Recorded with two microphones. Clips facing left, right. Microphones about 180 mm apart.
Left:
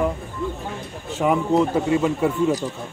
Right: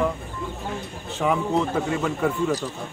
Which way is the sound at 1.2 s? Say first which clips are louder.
Left 4 dB; 5° left (ahead or behind).